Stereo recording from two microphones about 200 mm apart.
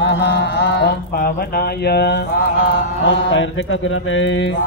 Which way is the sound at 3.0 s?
70° left (ahead or behind).